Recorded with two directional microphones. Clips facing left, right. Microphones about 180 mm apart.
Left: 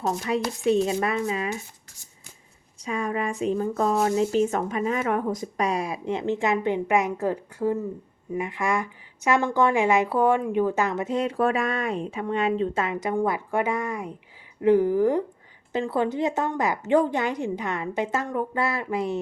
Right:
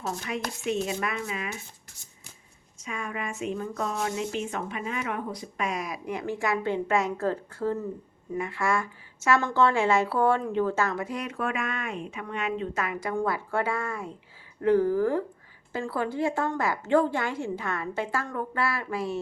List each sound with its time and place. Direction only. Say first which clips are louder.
0.0 s speech: left 7 dB; 35° left (ahead or behind)
2.7 s a woman's voice: left 7 dB; 35° left (ahead or behind)